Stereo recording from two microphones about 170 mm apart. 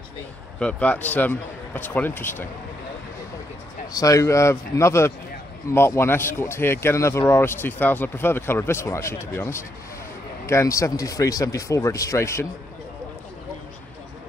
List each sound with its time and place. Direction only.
0.6 s speech: 5° left (ahead or behind)
3.9 s speech: 20° left (ahead or behind)